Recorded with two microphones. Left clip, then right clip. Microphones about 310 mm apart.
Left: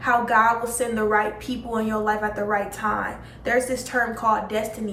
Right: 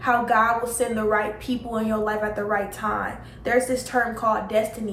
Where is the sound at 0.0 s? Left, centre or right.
Centre.